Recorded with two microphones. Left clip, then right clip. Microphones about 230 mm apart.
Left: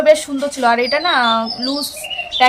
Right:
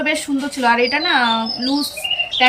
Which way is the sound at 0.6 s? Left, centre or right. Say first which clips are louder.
Left 1 dB; centre.